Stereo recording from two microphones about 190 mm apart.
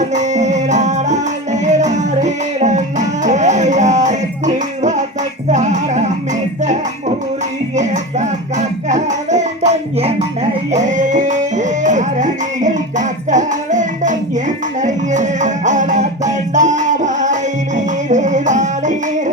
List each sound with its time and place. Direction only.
0.0 s music: 40° right (ahead or behind)
7.8 s music: 40° right (ahead or behind)